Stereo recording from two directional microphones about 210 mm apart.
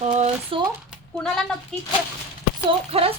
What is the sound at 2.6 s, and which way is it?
Speech, 25° right (ahead or behind).